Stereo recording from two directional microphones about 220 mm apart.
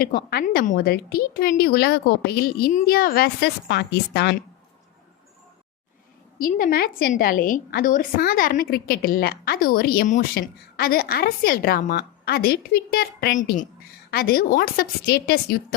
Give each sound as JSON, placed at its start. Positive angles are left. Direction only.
{"t": 0.0, "sound": "a woman's voice", "side_deg": 45}
{"t": 6.4, "sound": "a woman's voice", "side_deg": 40}